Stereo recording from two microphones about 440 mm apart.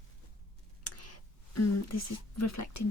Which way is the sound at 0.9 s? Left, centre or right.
Left.